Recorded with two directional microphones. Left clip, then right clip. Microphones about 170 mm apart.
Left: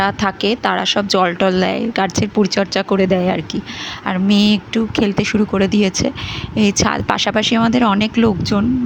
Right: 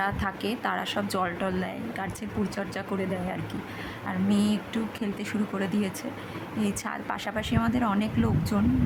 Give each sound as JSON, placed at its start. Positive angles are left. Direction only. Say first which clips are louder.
{"t": 0.0, "sound": "a woman's voice", "louder": "left 12 dB", "side_deg": 40}